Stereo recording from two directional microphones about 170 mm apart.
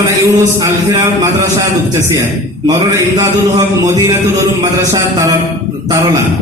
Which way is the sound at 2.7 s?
20° right (ahead or behind).